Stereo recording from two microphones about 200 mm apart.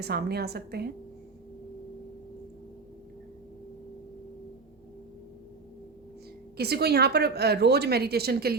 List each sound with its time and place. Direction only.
0.0 s a woman's voice: 50° right (ahead or behind)
6.6 s a woman's voice: 55° right (ahead or behind)